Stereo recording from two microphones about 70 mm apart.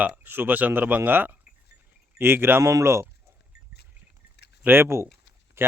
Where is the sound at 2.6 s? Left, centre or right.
Right.